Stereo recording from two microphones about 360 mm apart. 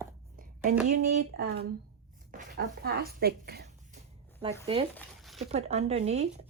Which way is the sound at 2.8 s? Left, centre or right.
Right.